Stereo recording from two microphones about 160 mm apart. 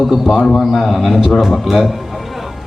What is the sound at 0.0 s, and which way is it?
A man's voice, centre (ahead or behind).